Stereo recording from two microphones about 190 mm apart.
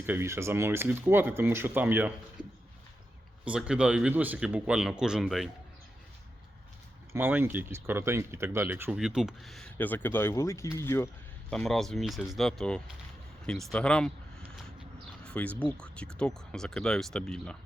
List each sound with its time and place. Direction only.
0.0 s speech: 10° right (ahead or behind)
2.4 s a sound: 25° right (ahead or behind)
3.4 s speech: 5° right (ahead or behind)
7.1 s speech: 10° right (ahead or behind); by 11.1 s 15° left (ahead or behind)
11.5 s speech: centre (ahead or behind)
15.2 s a sound: 5° left (ahead or behind)
15.6 s speech: 5° left (ahead or behind)